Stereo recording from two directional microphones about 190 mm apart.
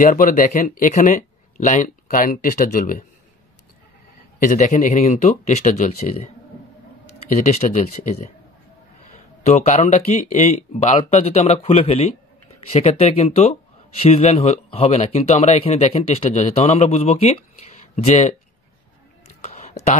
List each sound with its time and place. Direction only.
0.0 s speech: 45° left (ahead or behind)
4.4 s speech: 40° left (ahead or behind)
9.4 s speech: 35° left (ahead or behind)
19.4 s a sound: 40° left (ahead or behind)